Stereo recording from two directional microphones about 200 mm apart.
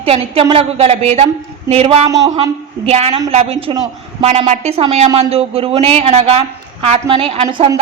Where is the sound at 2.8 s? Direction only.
30° right (ahead or behind).